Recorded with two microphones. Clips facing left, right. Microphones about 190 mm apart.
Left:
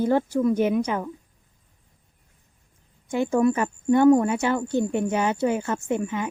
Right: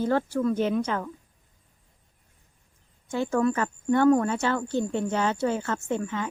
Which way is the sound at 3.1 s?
15° left (ahead or behind).